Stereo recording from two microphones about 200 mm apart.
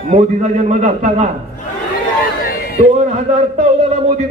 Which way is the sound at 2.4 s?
50° left (ahead or behind).